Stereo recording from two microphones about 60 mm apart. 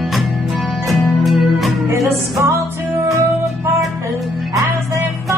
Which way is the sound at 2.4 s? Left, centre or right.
Right.